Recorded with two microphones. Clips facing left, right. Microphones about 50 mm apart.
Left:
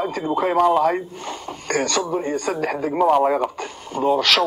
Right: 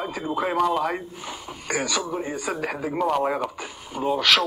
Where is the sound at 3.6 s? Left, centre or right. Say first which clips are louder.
Left 6 dB; centre.